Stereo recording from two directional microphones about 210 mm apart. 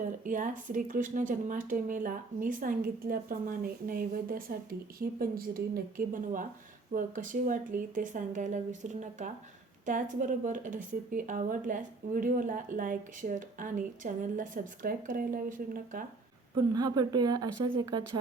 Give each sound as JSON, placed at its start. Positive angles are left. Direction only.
{"t": 0.0, "sound": "a woman's voice", "side_deg": -40}
{"t": 16.6, "sound": "speech", "side_deg": -15}